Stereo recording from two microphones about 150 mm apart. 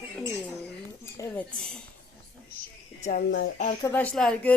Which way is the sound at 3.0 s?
55° left (ahead or behind).